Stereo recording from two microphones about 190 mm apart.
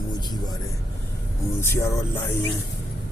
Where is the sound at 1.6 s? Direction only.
15° left (ahead or behind).